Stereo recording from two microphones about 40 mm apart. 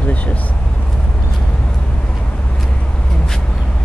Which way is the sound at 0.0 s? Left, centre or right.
Left.